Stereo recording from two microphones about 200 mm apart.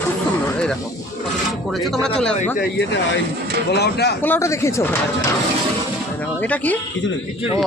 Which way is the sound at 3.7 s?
55° left (ahead or behind).